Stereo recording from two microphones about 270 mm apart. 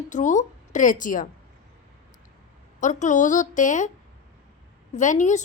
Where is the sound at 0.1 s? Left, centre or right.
Left.